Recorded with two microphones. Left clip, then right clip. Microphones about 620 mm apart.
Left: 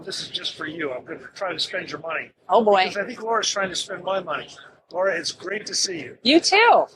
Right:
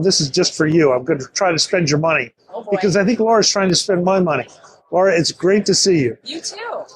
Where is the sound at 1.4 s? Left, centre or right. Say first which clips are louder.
Right 9 dB; right.